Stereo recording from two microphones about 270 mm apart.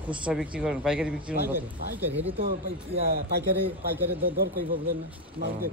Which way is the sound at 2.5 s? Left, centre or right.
Right.